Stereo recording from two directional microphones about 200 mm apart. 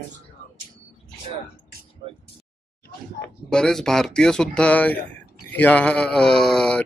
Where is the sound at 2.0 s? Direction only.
30° right (ahead or behind).